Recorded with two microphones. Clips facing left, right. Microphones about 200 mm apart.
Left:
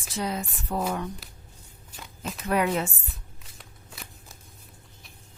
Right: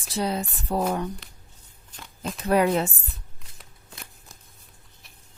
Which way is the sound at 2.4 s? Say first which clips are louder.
Right 4 dB; 35° right (ahead or behind).